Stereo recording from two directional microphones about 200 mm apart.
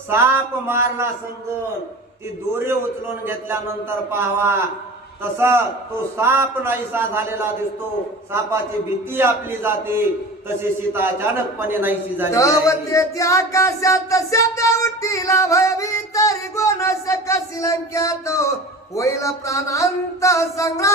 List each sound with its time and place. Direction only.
0.1 s a man's voice: 10° right (ahead or behind)
3.2 s a man's voice: 10° right (ahead or behind)
9.1 s a man's voice: 10° right (ahead or behind)
12.3 s music: 15° left (ahead or behind)